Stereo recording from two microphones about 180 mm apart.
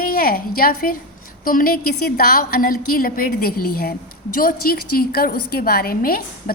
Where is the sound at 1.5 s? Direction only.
50° left (ahead or behind).